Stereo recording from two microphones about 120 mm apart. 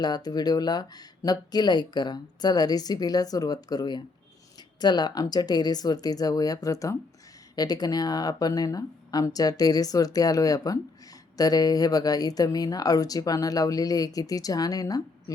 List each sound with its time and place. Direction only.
0.0 s speech: 35° left (ahead or behind)